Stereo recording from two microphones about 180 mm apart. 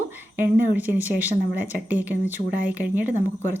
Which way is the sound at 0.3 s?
10° right (ahead or behind).